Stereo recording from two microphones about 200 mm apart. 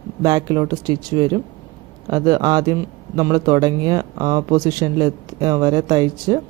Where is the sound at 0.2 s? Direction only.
20° right (ahead or behind).